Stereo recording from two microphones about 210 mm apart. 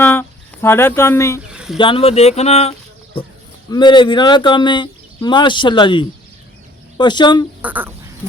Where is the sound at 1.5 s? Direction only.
5° right (ahead or behind).